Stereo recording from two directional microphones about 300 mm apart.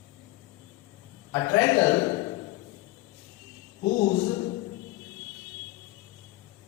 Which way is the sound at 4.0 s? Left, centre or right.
Left.